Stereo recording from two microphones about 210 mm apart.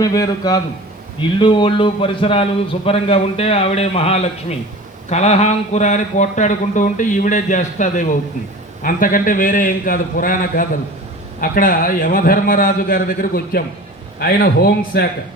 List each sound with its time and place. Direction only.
0.0 s a man's voice: 15° left (ahead or behind); by 15.0 s 50° left (ahead or behind)